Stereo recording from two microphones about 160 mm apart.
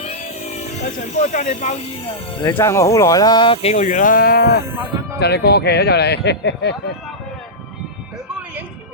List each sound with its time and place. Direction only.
0.0 s hiss: 45° left (ahead or behind)
2.5 s speech: 15° left (ahead or behind); by 4.6 s 70° left (ahead or behind)
5.2 s speech: 90° left